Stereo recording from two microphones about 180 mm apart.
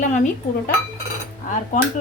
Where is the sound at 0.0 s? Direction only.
45° left (ahead or behind).